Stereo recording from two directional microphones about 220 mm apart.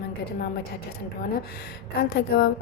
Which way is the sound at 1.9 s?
45° left (ahead or behind).